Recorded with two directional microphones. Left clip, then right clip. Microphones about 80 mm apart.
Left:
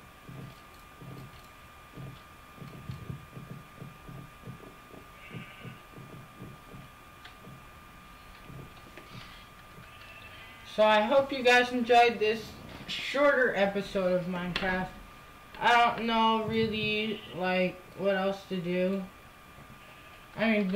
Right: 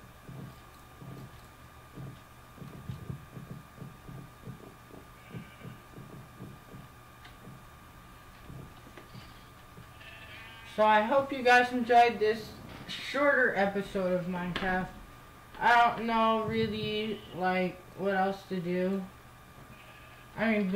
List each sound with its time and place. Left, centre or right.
10.8 s music: centre
11.5 s a man's voice: centre
13.2 s speech: centre
16.4 s music: centre
17.6 s speech: left
20.3 s speech: left